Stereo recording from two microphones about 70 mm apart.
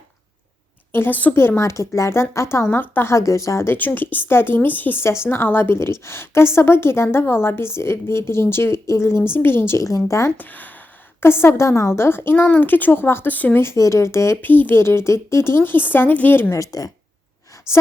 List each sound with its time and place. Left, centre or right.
0.9 s a woman's voice: left
1.4 s a woman's voice: left
2.6 s speech: left
3.1 s speech: left
3.7 s a woman's voice: left
9.8 s speech: left
10.3 s a woman's voice: left
13.7 s speech: left
14.4 s a woman's voice: left
16.5 s speech: left